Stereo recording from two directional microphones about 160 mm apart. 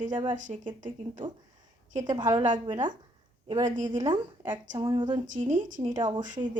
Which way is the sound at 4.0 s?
30° right (ahead or behind).